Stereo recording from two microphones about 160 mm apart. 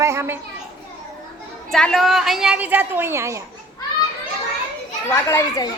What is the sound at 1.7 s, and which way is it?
A woman's voice, centre (ahead or behind).